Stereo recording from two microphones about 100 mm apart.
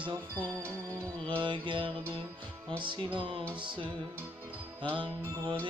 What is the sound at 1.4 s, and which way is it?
Music, 55° right (ahead or behind).